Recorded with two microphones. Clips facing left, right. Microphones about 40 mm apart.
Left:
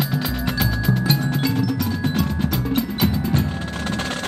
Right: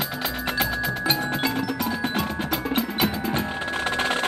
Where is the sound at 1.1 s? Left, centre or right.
Centre.